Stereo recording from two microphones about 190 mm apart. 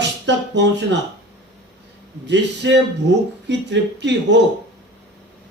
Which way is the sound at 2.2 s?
65° right (ahead or behind).